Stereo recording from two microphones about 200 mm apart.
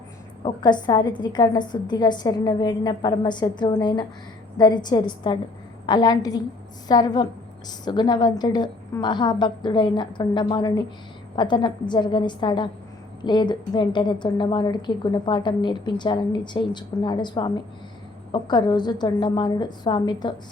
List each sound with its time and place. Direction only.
0.4 s a woman's voice: 20° left (ahead or behind)